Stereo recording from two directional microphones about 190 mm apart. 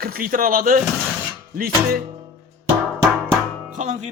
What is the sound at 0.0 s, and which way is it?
Speech, 50° right (ahead or behind).